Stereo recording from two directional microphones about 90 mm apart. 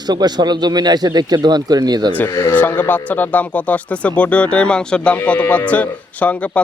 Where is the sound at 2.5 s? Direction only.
20° left (ahead or behind).